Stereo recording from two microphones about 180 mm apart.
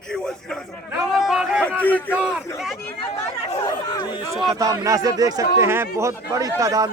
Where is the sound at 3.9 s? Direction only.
25° left (ahead or behind).